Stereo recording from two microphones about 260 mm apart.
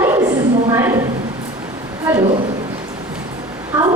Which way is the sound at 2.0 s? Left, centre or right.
Centre.